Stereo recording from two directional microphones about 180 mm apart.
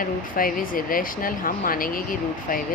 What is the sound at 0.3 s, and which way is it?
Speech, 50° left (ahead or behind).